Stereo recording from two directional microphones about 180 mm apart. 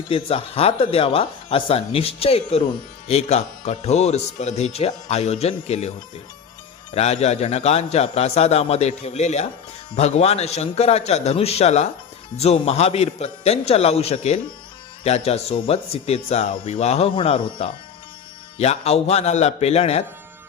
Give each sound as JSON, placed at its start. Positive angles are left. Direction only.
{"t": 0.1, "sound": "speech", "side_deg": 30}
{"t": 6.9, "sound": "speech", "side_deg": 35}